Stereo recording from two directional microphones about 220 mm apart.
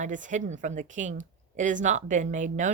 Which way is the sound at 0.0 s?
35° right (ahead or behind).